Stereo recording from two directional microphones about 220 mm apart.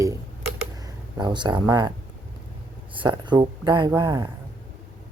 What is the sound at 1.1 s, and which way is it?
Speech, 20° right (ahead or behind).